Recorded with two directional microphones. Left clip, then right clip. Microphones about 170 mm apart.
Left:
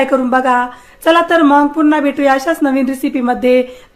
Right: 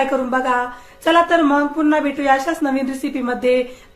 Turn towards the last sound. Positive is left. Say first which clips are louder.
# left 5 dB
turn(degrees=75)  # may be behind; listen again after turning